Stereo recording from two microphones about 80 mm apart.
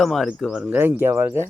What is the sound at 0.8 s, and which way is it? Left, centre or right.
Speech, right.